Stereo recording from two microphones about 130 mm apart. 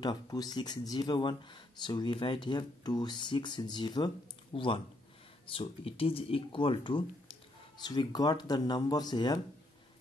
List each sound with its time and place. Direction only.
0.0 s speech: 30° left (ahead or behind)